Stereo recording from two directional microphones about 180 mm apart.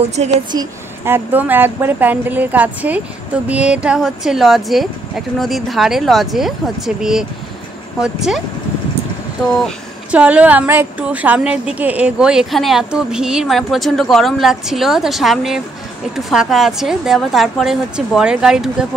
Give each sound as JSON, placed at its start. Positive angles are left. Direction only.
{"t": 0.1, "sound": "a woman's voice", "side_deg": -40}
{"t": 0.5, "sound": "a woman's voice", "side_deg": -15}
{"t": 9.5, "sound": "a woman's voice", "side_deg": 5}
{"t": 10.1, "sound": "a woman's voice", "side_deg": -5}